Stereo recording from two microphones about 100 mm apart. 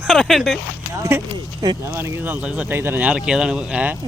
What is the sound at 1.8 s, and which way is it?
Speech, 25° right (ahead or behind).